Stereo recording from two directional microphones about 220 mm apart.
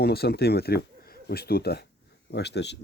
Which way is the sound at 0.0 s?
45° left (ahead or behind).